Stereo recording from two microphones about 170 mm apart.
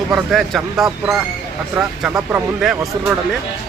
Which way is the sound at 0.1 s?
Centre (ahead or behind).